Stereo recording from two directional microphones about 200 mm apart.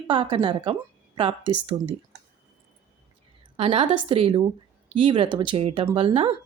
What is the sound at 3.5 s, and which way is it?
A woman's voice, 25° right (ahead or behind).